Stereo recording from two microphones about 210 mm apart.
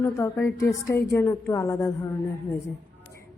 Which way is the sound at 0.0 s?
15° left (ahead or behind).